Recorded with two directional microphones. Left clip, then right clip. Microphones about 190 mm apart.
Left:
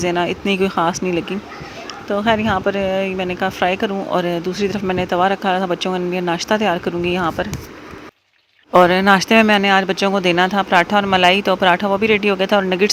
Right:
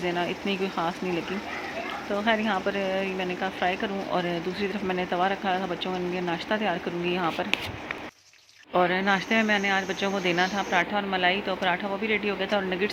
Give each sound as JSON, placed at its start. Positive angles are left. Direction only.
{"t": 0.0, "sound": "speech", "side_deg": 40}
{"t": 8.7, "sound": "speech", "side_deg": 45}